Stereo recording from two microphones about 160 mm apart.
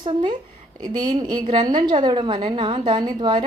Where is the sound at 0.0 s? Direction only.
30° right (ahead or behind).